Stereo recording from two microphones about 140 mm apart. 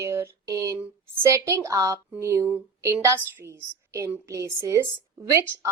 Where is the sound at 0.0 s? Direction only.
20° right (ahead or behind).